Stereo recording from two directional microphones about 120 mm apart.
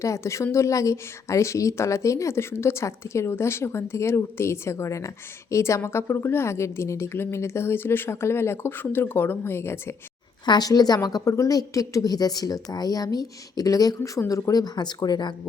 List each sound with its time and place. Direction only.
0.0 s speech: 25° left (ahead or behind)
10.4 s a woman's voice: 35° left (ahead or behind)